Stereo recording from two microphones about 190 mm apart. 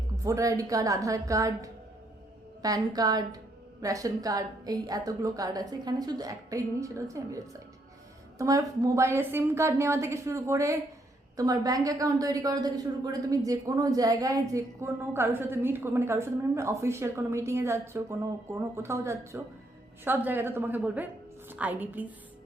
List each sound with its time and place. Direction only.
0.3 s a woman's voice: 15° right (ahead or behind)
8.4 s a woman's voice: 15° right (ahead or behind)